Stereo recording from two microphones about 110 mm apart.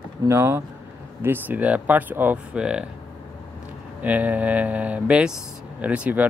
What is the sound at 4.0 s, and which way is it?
Speech, 15° right (ahead or behind).